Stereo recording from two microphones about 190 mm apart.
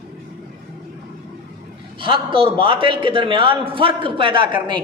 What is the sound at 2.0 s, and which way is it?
A man's voice, 25° right (ahead or behind).